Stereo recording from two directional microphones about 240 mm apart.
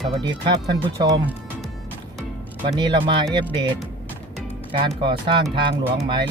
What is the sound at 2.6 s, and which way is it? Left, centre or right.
Speech, centre.